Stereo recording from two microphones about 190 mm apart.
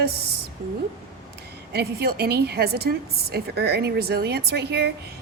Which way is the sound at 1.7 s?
55° right (ahead or behind).